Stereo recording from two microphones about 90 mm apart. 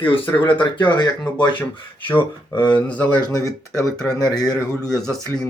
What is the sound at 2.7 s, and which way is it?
Speech, 15° left (ahead or behind).